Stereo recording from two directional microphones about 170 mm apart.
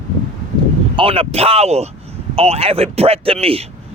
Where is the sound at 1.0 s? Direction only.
35° right (ahead or behind).